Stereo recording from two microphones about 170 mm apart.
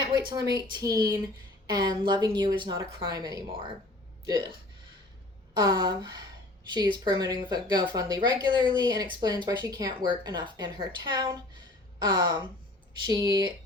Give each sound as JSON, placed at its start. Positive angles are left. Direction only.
{"t": 0.0, "sound": "a woman's voice", "side_deg": -25}
{"t": 5.5, "sound": "a woman's voice", "side_deg": -25}